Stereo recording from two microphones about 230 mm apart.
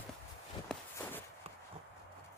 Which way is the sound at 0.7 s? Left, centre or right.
Centre.